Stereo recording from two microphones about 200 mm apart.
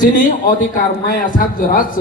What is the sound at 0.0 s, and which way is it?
A man's voice, 40° left (ahead or behind).